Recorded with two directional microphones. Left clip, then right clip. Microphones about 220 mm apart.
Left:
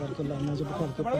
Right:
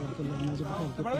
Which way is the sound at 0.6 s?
Centre (ahead or behind).